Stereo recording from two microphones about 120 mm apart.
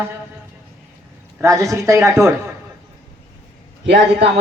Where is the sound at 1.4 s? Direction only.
25° right (ahead or behind).